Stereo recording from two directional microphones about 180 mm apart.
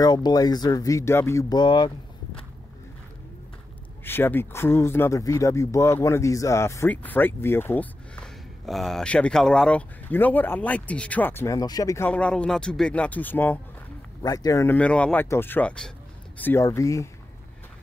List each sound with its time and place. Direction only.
0.0 s speech: 20° left (ahead or behind)
4.0 s speech: 10° left (ahead or behind)
12.1 s speech: 5° left (ahead or behind)